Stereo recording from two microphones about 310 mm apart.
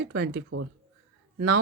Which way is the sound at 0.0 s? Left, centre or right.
Right.